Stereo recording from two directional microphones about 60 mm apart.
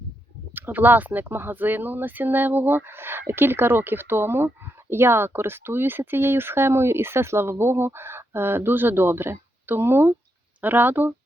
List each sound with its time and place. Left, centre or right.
0.5 s speech: right